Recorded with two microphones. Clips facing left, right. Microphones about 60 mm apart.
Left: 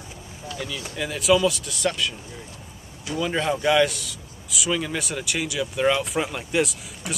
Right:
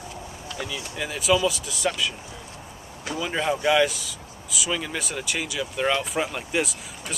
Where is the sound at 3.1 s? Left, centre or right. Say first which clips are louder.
Left 2 dB; centre.